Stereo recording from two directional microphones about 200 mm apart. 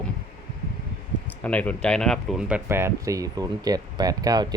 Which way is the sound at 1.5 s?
5° left (ahead or behind).